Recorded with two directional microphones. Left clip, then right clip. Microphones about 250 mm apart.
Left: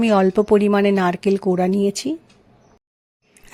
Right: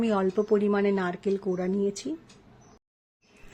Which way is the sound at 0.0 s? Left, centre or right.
Left.